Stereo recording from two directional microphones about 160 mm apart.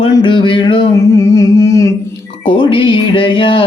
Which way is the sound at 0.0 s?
30° left (ahead or behind).